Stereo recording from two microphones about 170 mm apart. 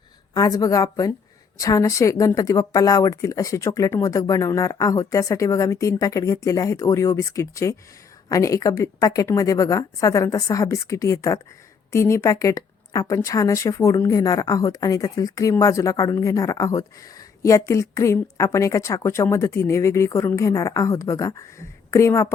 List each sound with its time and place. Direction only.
0.3 s a woman's voice: 20° left (ahead or behind)